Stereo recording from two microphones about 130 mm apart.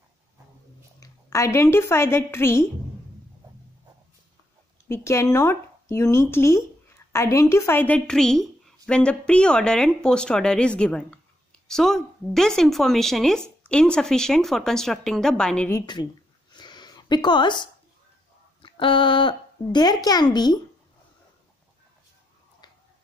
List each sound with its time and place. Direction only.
0.9 s a woman's voice: 25° left (ahead or behind)
4.8 s a woman's voice: 20° left (ahead or behind)
15.8 s speech: 35° left (ahead or behind)
16.5 s a sound: 35° left (ahead or behind)
18.6 s speech: 40° left (ahead or behind)